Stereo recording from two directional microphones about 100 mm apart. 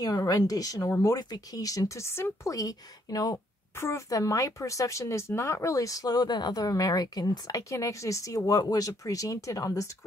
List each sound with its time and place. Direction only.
0.0 s speech: 40° left (ahead or behind)
3.7 s speech: 30° left (ahead or behind)